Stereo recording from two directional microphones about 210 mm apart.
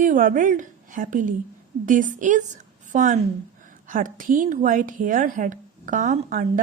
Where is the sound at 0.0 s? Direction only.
40° right (ahead or behind).